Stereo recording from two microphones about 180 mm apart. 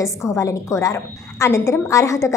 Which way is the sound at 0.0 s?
15° left (ahead or behind).